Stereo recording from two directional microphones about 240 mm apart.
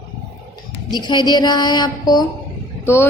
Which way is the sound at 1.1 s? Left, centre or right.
Centre.